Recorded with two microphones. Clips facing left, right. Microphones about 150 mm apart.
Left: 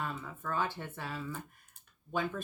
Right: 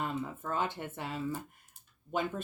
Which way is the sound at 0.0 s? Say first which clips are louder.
Right 3 dB; 20° right (ahead or behind).